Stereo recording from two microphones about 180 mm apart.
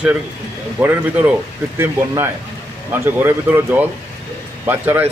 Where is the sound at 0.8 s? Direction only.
10° right (ahead or behind).